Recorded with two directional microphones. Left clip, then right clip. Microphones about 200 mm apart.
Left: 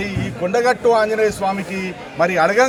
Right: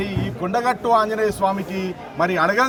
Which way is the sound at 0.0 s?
5° right (ahead or behind).